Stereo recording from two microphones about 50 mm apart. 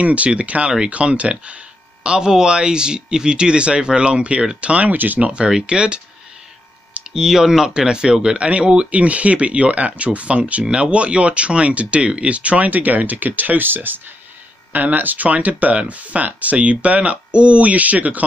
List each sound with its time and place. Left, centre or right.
0.0 s speech: right
5.3 s speech: right
7.2 s speech: centre; by 18.2 s right